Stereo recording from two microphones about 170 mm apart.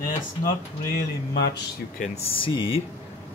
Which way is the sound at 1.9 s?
40° left (ahead or behind).